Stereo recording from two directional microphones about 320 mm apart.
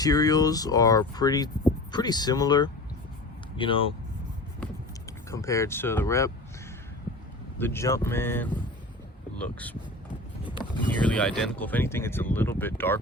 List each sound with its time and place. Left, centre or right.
0.0 s speech: centre
7.6 s speech: centre